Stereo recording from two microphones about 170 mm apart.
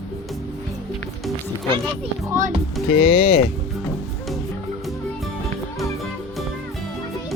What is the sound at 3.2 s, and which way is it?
Speech, 60° left (ahead or behind).